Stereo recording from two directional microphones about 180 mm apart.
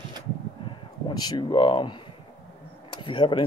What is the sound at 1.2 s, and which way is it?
Speech, 25° left (ahead or behind).